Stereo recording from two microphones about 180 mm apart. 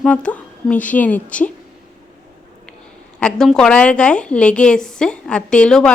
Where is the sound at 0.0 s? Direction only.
5° left (ahead or behind).